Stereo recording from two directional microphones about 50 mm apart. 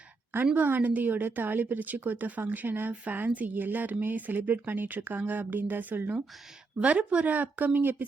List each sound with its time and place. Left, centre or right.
0.5 s a woman's voice: right
6.7 s a woman's voice: right